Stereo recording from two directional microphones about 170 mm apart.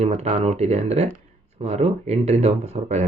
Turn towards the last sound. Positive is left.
turn(degrees=-40)  # may be behind; listen again after turning